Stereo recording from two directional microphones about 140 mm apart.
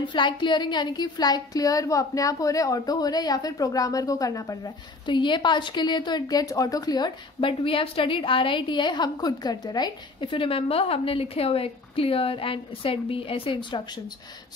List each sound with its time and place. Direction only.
0.0 s a woman's voice: 35° left (ahead or behind)
7.3 s a woman's voice: 40° left (ahead or behind)